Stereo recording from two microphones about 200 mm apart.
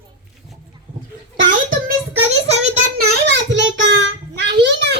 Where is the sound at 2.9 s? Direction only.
60° right (ahead or behind).